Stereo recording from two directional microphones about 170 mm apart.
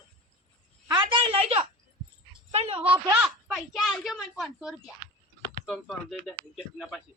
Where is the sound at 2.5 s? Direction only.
35° right (ahead or behind).